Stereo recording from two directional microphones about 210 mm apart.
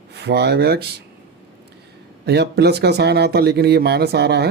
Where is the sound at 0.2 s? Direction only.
50° right (ahead or behind).